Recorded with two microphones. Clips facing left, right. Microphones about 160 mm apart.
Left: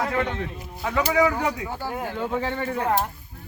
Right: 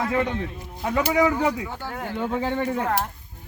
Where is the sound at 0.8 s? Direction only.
15° right (ahead or behind).